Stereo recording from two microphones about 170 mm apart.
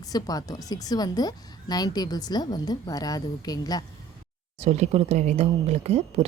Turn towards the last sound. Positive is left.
turn(degrees=-35)  # may be behind; listen again after turning